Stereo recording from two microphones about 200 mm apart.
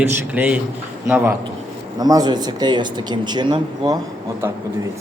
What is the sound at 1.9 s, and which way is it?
A man's voice, 20° right (ahead or behind).